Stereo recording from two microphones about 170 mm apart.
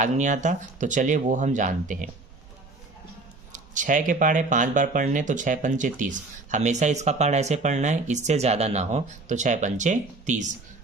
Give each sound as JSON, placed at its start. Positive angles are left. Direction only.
{"t": 0.0, "sound": "speech", "side_deg": -45}
{"t": 3.5, "sound": "speech", "side_deg": -50}